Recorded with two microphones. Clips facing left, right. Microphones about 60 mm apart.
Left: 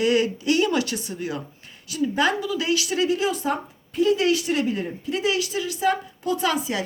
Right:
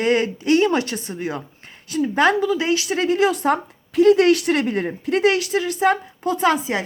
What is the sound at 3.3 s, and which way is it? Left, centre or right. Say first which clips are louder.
A woman's voice: right 5 dB; right.